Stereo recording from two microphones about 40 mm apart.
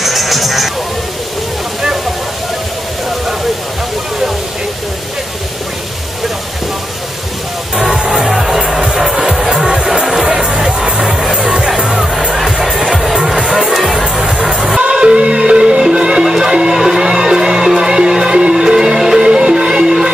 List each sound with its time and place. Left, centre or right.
0.0 s music: centre
7.7 s music: centre
14.8 s music: right